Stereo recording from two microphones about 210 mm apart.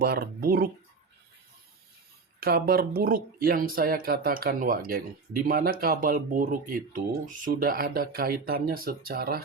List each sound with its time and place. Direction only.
0.0 s speech: 45° right (ahead or behind)
2.4 s speech: 45° right (ahead or behind)